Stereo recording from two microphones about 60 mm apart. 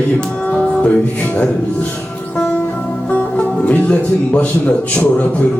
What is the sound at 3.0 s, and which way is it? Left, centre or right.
Music, left.